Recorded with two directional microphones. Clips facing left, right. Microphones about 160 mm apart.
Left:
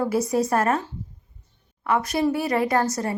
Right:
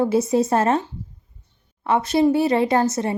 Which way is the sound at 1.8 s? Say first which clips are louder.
Right 4 dB; 25° right (ahead or behind).